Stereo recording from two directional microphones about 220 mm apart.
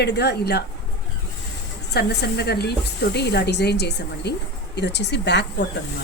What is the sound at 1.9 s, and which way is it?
A woman's voice, 45° left (ahead or behind).